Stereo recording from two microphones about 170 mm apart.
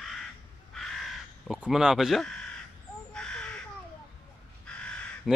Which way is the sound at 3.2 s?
5° left (ahead or behind).